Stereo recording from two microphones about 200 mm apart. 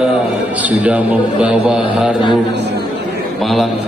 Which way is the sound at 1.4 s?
5° right (ahead or behind).